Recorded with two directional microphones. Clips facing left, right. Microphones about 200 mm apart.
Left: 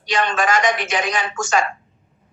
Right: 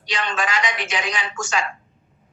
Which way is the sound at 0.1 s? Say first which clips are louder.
Left 6 dB; 45° left (ahead or behind).